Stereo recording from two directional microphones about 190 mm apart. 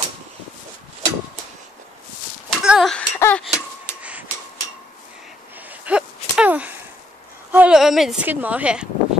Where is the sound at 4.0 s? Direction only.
5° right (ahead or behind).